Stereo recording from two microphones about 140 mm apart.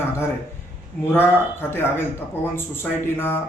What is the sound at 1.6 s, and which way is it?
A man's voice, 15° left (ahead or behind).